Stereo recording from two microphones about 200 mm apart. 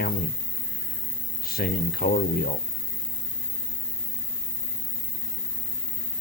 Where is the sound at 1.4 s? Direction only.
50° left (ahead or behind).